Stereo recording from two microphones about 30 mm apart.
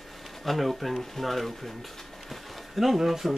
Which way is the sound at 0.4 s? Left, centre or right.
Centre.